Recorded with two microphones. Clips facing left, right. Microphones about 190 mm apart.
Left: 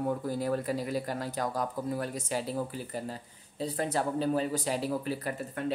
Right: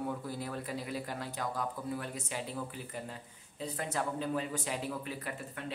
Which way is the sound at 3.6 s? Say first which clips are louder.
Left 5 dB; 35° left (ahead or behind).